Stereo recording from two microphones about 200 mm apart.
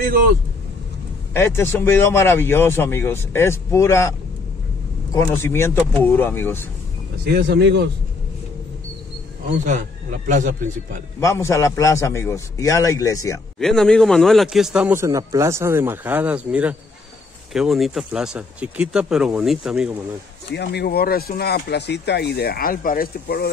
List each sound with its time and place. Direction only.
0.0 s speech: 45° right (ahead or behind)
1.3 s speech: 10° left (ahead or behind)
5.1 s speech: 10° left (ahead or behind)
7.2 s speech: 55° right (ahead or behind)
9.7 s a man's voice: 40° right (ahead or behind)
11.1 s speech: 15° left (ahead or behind)
13.6 s a man's voice: centre (ahead or behind)
20.5 s speech: 55° left (ahead or behind)